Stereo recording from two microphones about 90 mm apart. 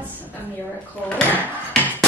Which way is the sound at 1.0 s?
15° left (ahead or behind).